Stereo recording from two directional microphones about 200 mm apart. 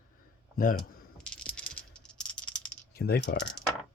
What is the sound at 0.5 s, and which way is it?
Speech, 45° left (ahead or behind).